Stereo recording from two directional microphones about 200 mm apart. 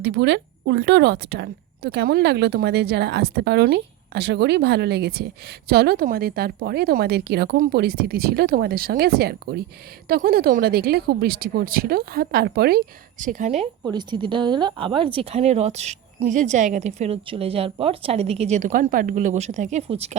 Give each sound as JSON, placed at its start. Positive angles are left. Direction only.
{"t": 0.0, "sound": "speech", "side_deg": -60}
{"t": 13.8, "sound": "speech", "side_deg": -20}